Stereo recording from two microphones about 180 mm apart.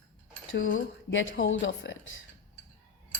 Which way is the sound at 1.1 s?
90° left.